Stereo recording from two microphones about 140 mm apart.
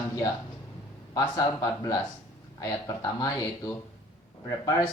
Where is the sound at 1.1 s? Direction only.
25° left (ahead or behind).